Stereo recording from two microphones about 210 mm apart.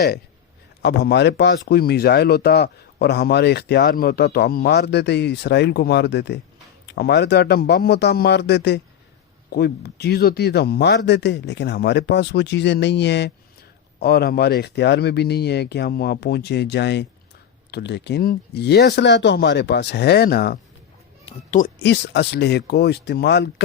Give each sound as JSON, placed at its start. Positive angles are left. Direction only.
{"t": 0.8, "sound": "speech", "side_deg": 55}
{"t": 21.2, "sound": "a sound", "side_deg": 35}
{"t": 21.8, "sound": "speech", "side_deg": 55}